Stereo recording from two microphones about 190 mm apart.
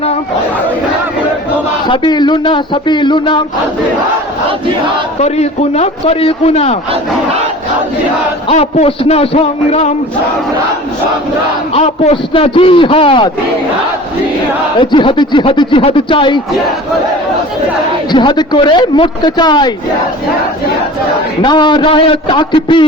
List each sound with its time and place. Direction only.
1.9 s speech: 20° left (ahead or behind)
5.2 s a man's voice: 35° left (ahead or behind)
8.4 s a man's voice: 35° left (ahead or behind)
11.7 s speech: 30° left (ahead or behind)
14.8 s speech: 25° left (ahead or behind)
18.1 s speech: 25° left (ahead or behind)
21.4 s speech: 25° left (ahead or behind)